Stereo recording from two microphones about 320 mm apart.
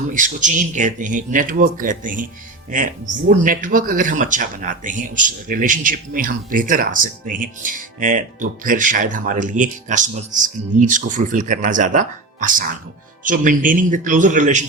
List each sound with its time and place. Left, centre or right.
0.1 s speech: right